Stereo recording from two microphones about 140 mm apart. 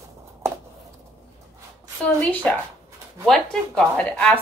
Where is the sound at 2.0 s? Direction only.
10° left (ahead or behind).